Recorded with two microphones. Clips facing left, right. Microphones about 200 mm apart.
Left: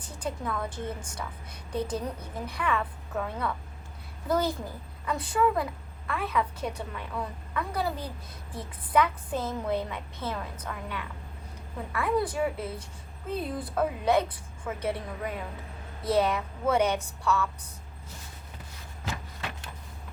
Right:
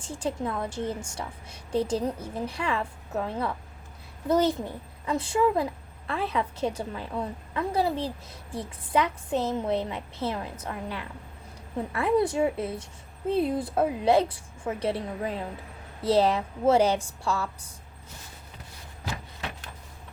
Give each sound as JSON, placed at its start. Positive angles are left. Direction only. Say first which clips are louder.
{"t": 0.0, "sound": "a woman's voice", "louder": "right 4 dB", "side_deg": -25}